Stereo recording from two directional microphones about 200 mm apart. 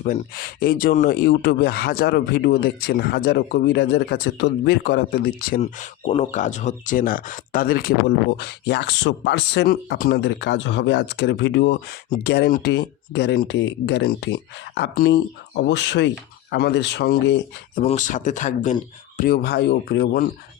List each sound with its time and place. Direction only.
0.0 s speech: 45° left (ahead or behind)
6.1 s speech: 35° left (ahead or behind); by 17.4 s 60° left (ahead or behind)
17.8 s speech: 40° left (ahead or behind); by 20.2 s 55° left (ahead or behind)